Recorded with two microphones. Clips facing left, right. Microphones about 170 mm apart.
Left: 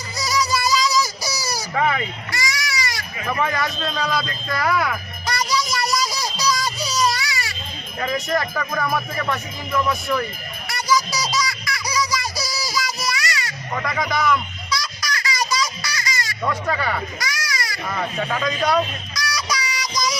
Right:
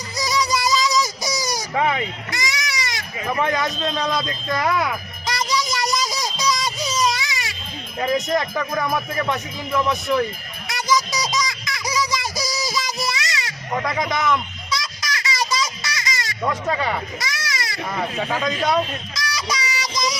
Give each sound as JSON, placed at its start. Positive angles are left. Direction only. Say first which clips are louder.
{"t": 0.5, "sound": "child singing", "louder": "even", "side_deg": -20}
{"t": 1.7, "sound": "sheep", "louder": "even", "side_deg": -15}
{"t": 3.5, "sound": "speech", "louder": "right 2 dB", "side_deg": -20}
{"t": 6.0, "sound": "a sound", "louder": "even", "side_deg": -20}
{"t": 7.9, "sound": "speech", "louder": "right 2 dB", "side_deg": -20}
{"t": 10.8, "sound": "music", "louder": "even", "side_deg": -20}
{"t": 13.1, "sound": "a sound", "louder": "left 1 dB", "side_deg": -25}
{"t": 16.4, "sound": "speech", "louder": "right 1 dB", "side_deg": -20}
{"t": 18.7, "sound": "a sound", "louder": "even", "side_deg": -25}